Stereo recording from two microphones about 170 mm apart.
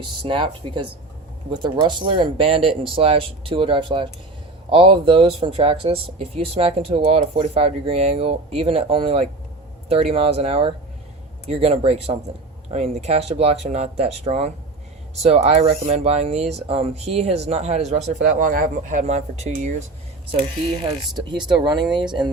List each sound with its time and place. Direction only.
0.0 s speech: 30° right (ahead or behind)
21.6 s speech: 25° right (ahead or behind)